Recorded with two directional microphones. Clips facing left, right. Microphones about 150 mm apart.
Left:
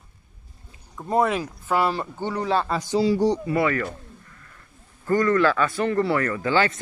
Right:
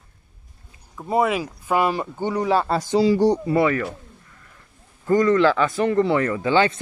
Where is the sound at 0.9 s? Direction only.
5° right (ahead or behind).